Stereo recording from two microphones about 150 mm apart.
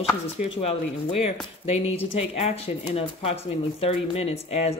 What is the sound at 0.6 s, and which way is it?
Speech, 40° left (ahead or behind).